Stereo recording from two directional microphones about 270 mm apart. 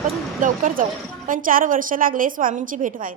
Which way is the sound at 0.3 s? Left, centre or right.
Right.